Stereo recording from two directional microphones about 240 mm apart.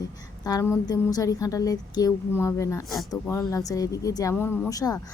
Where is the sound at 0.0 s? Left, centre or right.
Centre.